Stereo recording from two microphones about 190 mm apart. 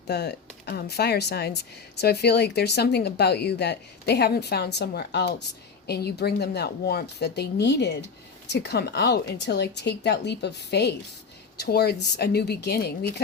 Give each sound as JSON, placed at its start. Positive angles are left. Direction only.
{"t": 0.1, "sound": "speech", "side_deg": 60}